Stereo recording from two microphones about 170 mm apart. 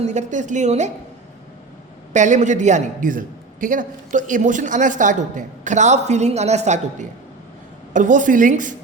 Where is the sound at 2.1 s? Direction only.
45° right (ahead or behind).